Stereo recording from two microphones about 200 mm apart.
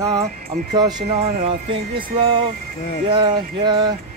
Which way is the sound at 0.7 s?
20° right (ahead or behind).